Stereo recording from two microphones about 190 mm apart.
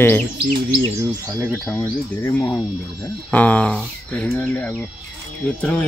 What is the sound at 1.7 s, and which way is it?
Speech, 10° left (ahead or behind).